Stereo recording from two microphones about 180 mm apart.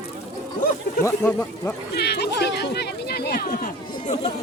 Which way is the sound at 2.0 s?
65° left (ahead or behind).